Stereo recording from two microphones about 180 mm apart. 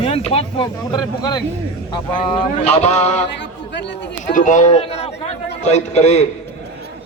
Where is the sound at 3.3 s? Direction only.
75° left (ahead or behind).